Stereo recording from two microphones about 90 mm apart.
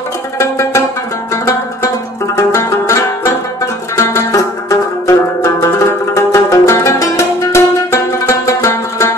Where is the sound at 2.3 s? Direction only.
35° left (ahead or behind).